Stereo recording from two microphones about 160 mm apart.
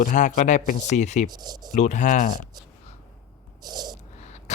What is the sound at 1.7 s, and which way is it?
Speech, 50° left (ahead or behind).